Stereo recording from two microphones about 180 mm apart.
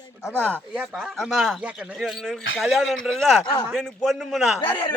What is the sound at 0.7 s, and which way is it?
Speech, centre (ahead or behind).